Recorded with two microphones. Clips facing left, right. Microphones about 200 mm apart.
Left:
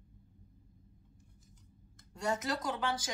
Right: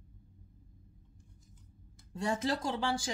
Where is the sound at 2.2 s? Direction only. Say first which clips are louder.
Right 2 dB; 30° right (ahead or behind).